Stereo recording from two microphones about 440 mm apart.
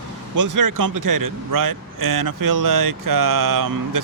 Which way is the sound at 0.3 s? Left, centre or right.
Right.